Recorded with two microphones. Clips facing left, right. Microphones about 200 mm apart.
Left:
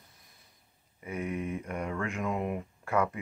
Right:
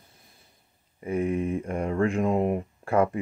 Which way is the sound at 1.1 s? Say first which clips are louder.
Right 8 dB; 30° right (ahead or behind).